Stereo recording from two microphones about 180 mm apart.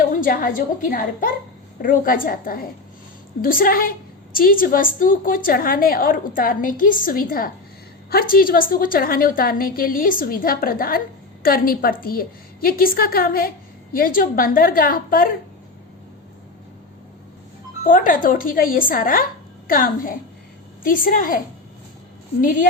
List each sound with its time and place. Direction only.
0.1 s a woman's voice: 50° left (ahead or behind)
17.8 s a woman's voice: 50° left (ahead or behind)